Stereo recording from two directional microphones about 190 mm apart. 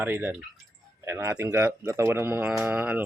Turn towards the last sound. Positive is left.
turn(degrees=-10)  # may be behind; listen again after turning